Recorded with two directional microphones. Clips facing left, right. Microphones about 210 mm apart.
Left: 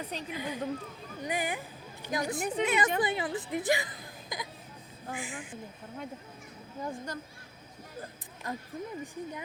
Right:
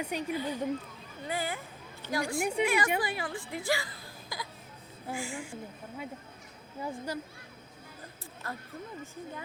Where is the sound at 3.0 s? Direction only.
20° left (ahead or behind).